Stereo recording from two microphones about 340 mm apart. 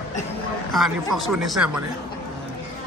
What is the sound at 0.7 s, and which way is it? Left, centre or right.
Speech, centre.